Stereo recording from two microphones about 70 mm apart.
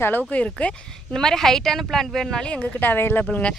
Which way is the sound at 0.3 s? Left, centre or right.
Centre.